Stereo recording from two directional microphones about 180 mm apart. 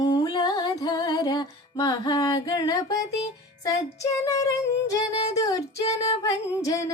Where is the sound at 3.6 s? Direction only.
20° left (ahead or behind).